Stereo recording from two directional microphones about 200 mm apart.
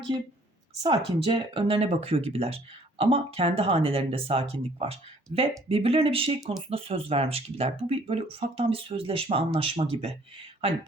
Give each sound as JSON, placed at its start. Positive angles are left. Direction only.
{"t": 0.8, "sound": "speech", "side_deg": -25}